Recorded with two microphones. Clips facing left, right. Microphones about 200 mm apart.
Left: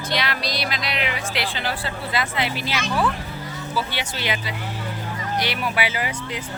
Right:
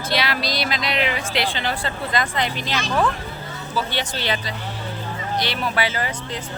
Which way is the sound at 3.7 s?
10° left (ahead or behind).